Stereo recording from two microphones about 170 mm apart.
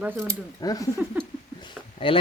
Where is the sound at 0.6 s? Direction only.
20° left (ahead or behind).